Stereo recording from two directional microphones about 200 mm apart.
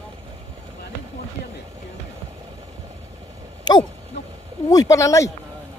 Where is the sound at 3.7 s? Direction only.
20° left (ahead or behind).